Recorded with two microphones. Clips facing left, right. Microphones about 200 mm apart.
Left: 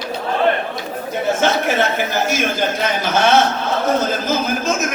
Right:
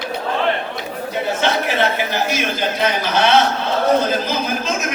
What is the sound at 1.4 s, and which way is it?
A man's voice, 45° left (ahead or behind).